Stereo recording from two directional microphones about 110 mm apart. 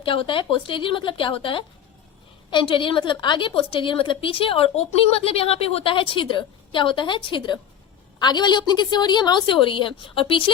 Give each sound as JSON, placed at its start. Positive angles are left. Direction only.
{"t": 0.0, "sound": "a woman's voice", "side_deg": 50}